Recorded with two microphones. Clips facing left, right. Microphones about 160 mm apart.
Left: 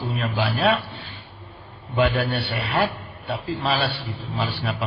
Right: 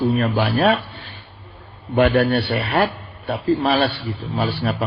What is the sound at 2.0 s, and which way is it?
A man's voice, 55° right (ahead or behind).